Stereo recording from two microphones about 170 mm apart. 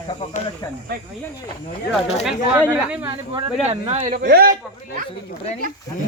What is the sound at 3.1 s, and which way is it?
Speech, 30° right (ahead or behind).